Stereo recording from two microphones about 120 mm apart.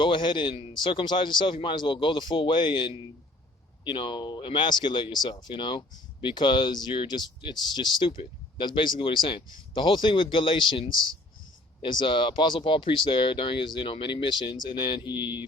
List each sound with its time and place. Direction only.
0.0 s a man's voice: 40° left (ahead or behind)